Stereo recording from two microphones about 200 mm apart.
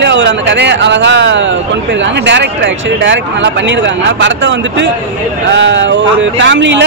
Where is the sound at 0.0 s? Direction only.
60° right (ahead or behind).